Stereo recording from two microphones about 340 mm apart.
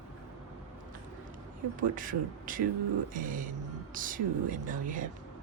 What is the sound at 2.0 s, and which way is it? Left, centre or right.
Speech, right.